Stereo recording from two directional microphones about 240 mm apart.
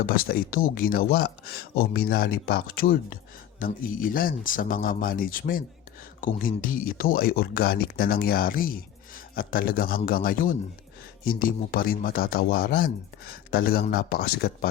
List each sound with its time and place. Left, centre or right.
0.0 s speech: left